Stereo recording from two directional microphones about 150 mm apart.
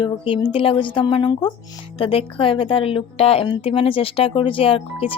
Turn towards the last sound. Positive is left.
turn(degrees=35)  # may be behind; listen again after turning